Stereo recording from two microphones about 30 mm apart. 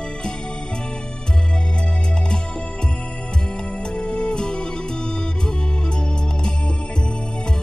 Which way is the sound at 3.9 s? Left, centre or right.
Left.